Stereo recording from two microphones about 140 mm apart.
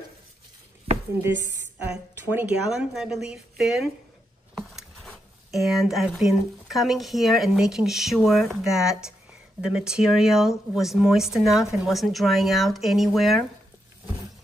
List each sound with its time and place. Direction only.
2.1 s speech: 15° right (ahead or behind)
2.7 s speech: 5° right (ahead or behind)